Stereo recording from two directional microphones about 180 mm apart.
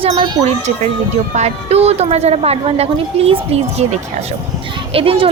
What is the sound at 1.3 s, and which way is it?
Speech, 35° right (ahead or behind).